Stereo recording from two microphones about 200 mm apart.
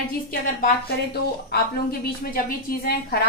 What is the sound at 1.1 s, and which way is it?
A woman's voice, 50° left (ahead or behind).